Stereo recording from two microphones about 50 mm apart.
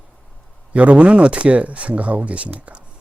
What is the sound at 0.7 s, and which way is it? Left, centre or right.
Speech, right.